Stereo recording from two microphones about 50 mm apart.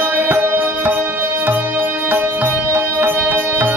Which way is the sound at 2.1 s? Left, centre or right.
Right.